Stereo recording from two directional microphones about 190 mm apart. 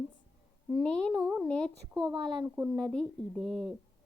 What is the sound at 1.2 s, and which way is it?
Speech, 5° right (ahead or behind).